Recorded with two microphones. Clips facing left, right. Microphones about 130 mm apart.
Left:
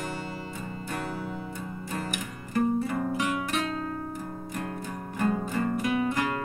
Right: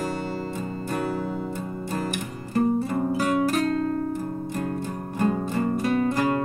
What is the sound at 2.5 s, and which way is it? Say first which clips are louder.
Guitar: right 3 dB; 30° right (ahead or behind).